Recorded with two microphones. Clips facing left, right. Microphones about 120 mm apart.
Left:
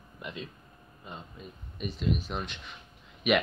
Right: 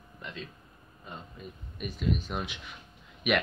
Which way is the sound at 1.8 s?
Centre (ahead or behind).